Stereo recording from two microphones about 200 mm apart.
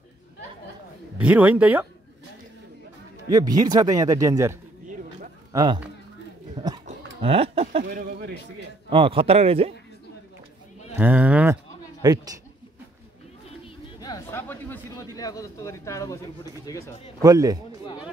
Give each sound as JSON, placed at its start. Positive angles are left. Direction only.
{"t": 1.1, "sound": "speech", "side_deg": -10}
{"t": 3.3, "sound": "speech", "side_deg": -20}
{"t": 6.6, "sound": "a sound", "side_deg": -25}
{"t": 7.8, "sound": "a man's voice", "side_deg": -45}
{"t": 8.9, "sound": "a man's voice", "side_deg": -25}
{"t": 11.0, "sound": "speech", "side_deg": -5}
{"t": 12.0, "sound": "a man's voice", "side_deg": -20}
{"t": 13.9, "sound": "chatter", "side_deg": 20}
{"t": 15.1, "sound": "speech", "side_deg": 15}
{"t": 17.2, "sound": "speech", "side_deg": -15}